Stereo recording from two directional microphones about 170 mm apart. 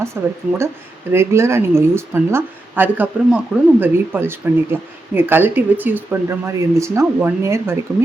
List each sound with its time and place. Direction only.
0.0 s a woman's voice: 15° right (ahead or behind)